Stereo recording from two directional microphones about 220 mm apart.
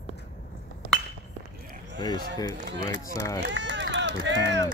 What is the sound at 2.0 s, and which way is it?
Speech, 20° left (ahead or behind).